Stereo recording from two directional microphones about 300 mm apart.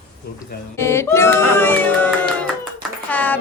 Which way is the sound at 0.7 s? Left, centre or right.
Centre.